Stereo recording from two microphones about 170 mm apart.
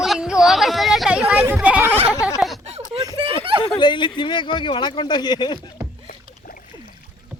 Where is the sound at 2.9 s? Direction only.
25° right (ahead or behind).